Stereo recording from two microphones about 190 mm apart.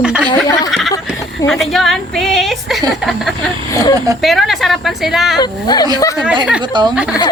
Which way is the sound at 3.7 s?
20° left (ahead or behind).